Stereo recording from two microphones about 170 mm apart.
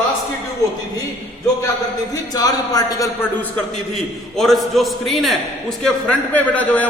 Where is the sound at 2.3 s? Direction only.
20° left (ahead or behind).